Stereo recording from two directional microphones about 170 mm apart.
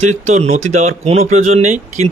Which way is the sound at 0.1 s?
40° right (ahead or behind).